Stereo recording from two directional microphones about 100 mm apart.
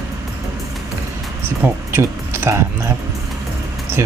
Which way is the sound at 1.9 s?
25° right (ahead or behind).